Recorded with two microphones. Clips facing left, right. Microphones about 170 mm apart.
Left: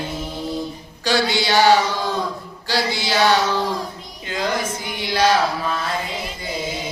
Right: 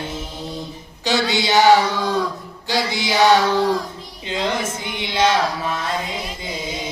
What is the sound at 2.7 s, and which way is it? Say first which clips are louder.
Mantra: even; 20° right (ahead or behind).